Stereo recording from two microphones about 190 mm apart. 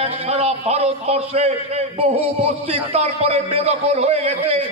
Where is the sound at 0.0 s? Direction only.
30° right (ahead or behind).